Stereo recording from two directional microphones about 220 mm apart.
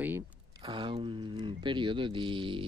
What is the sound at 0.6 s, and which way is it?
Speech, 20° right (ahead or behind).